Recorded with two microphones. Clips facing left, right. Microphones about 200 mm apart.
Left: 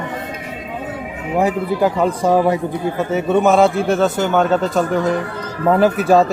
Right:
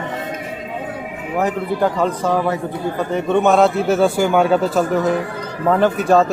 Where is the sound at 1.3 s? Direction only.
10° left (ahead or behind).